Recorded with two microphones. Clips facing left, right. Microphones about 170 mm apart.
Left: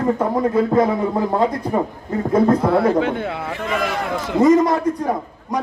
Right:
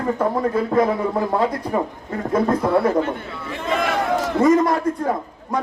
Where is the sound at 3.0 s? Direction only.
80° left; by 3.6 s 65° left (ahead or behind).